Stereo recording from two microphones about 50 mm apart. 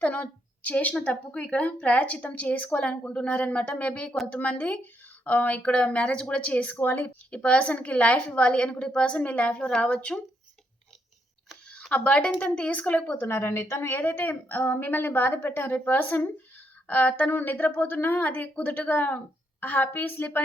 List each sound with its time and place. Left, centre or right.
0.0 s a woman's voice: left
6.7 s a woman's voice: left
11.8 s a woman's voice: left
13.1 s a woman's voice: left
13.9 s speech: left
16.0 s speech: left
16.9 s speech: left